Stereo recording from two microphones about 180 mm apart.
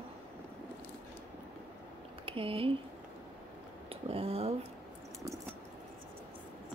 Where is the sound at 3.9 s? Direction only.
30° right (ahead or behind).